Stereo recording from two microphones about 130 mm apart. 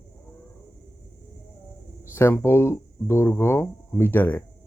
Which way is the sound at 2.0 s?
20° left (ahead or behind).